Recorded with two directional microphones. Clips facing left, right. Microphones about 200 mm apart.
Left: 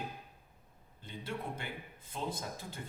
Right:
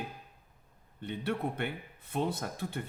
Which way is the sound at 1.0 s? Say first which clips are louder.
Right 8 dB; 65° right (ahead or behind).